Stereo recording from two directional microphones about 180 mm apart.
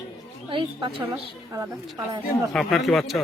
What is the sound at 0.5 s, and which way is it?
Speech, 30° right (ahead or behind).